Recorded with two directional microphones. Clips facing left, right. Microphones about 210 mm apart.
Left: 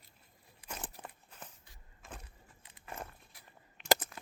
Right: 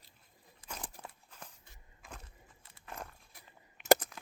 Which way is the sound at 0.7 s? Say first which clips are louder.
Left 1 dB; 5° left (ahead or behind).